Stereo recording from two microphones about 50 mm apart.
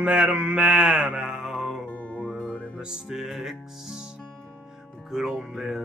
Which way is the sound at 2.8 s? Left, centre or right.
Centre.